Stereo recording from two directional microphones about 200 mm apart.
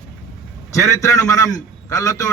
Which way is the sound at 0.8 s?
15° left (ahead or behind).